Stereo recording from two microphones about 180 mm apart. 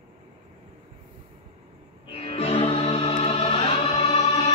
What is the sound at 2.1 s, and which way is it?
Music, 35° left (ahead or behind).